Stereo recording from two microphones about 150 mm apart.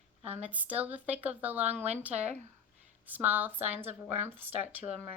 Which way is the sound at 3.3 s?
10° right (ahead or behind).